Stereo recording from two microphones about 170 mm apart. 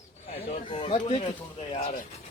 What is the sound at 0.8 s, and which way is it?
Speech, 35° left (ahead or behind).